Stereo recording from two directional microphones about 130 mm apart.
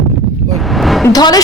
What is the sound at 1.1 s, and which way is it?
Speech, 30° left (ahead or behind).